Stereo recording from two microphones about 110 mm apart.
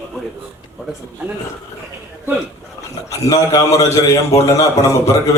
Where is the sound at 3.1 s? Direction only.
30° left (ahead or behind).